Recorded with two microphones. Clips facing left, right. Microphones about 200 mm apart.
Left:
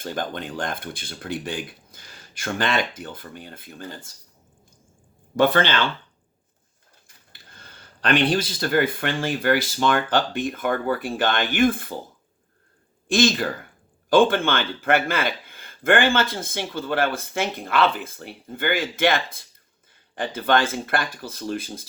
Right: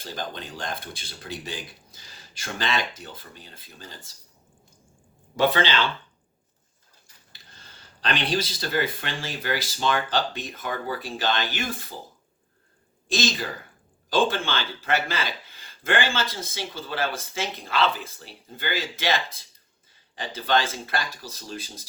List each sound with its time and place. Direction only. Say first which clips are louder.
0.0 s speech: left 5 dB; 55° left (ahead or behind)
5.4 s speech: left 3 dB; 50° left (ahead or behind)
7.3 s speech: left 4 dB; 55° left (ahead or behind)
13.1 s speech: left 7 dB; 55° left (ahead or behind)